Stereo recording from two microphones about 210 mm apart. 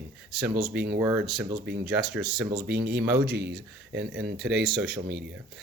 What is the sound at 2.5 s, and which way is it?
Speech, 45° right (ahead or behind).